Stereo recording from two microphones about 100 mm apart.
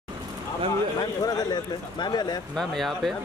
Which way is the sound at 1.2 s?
45° left (ahead or behind).